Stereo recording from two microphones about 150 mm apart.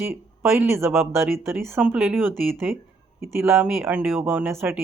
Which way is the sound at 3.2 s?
15° right (ahead or behind).